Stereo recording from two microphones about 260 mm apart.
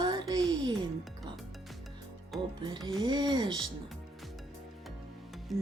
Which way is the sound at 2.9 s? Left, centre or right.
Centre.